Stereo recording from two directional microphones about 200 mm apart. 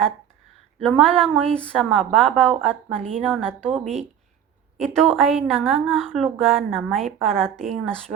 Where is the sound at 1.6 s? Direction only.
Centre (ahead or behind).